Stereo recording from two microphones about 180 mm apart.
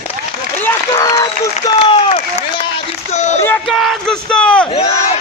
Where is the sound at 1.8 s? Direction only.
35° left (ahead or behind).